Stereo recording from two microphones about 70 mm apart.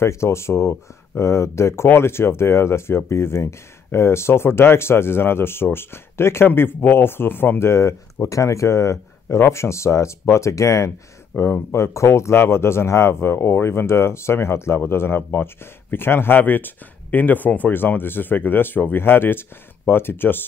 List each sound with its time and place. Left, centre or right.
0.0 s speech: left